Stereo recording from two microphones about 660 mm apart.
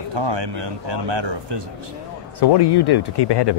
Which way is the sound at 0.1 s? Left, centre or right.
Right.